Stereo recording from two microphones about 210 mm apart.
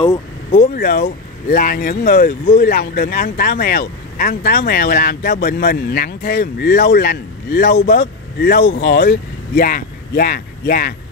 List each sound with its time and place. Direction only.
0.5 s speech: 45° left (ahead or behind)